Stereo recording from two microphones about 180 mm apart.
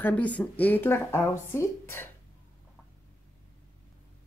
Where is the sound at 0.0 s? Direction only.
10° left (ahead or behind).